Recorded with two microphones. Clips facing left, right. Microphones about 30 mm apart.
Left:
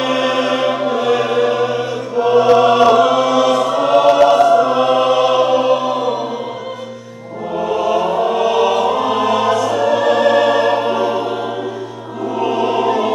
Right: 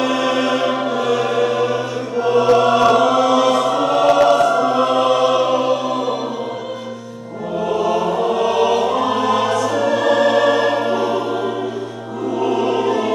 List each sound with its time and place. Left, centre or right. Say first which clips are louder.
0.0 s music: left 1 dB; centre
2.2 s chant: left 3 dB; centre
3.8 s choir: left 4 dB; centre
7.6 s choir: left 2 dB; centre
12.4 s music: left 2 dB; centre